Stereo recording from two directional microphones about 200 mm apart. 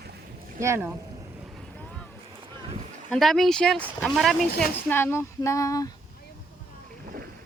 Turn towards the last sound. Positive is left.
turn(degrees=15)  # may be behind; listen again after turning